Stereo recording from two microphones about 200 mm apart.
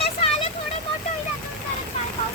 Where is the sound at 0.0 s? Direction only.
30° left (ahead or behind).